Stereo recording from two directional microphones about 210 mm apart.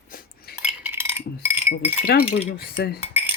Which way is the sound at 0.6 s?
10° right (ahead or behind).